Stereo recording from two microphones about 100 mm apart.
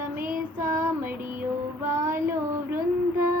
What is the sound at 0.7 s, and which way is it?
Child singing, 25° right (ahead or behind).